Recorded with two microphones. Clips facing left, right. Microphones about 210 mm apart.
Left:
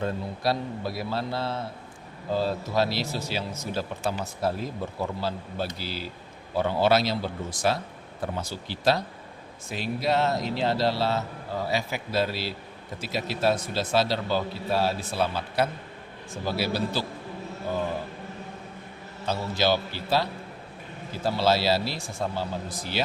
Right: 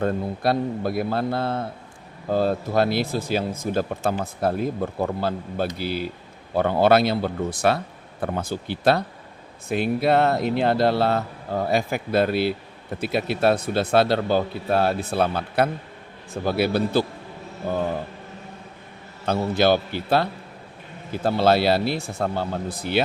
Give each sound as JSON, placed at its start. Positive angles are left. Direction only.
{"t": 0.0, "sound": "speech", "side_deg": -55}
{"t": 19.2, "sound": "speech", "side_deg": -55}